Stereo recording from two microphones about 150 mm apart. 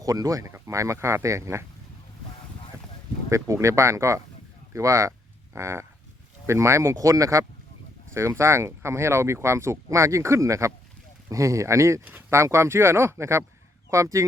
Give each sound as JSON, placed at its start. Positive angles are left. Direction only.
{"t": 0.0, "sound": "speech", "side_deg": -25}
{"t": 3.2, "sound": "speech", "side_deg": -20}